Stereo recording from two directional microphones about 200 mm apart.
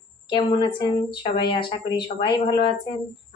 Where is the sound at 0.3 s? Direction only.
20° left (ahead or behind).